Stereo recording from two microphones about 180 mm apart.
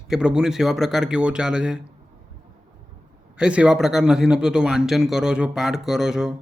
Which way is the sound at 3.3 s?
5° right (ahead or behind).